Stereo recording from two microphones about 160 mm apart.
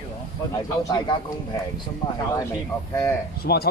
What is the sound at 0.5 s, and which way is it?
Speech, 25° left (ahead or behind).